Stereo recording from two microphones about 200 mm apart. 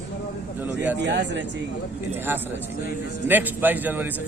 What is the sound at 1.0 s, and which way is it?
Speech, 60° right (ahead or behind).